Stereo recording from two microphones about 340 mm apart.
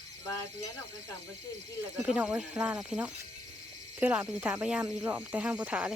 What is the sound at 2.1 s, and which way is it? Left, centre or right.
Speech, centre.